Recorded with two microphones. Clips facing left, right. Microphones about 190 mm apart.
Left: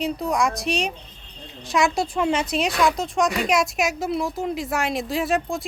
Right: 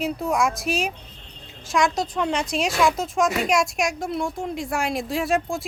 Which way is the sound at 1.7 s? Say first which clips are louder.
Left 1 dB; 10° left (ahead or behind).